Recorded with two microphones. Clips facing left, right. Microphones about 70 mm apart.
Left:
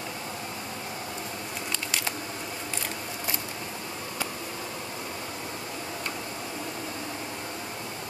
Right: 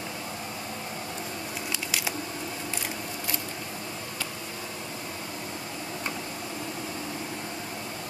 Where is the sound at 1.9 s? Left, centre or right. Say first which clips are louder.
Even; centre.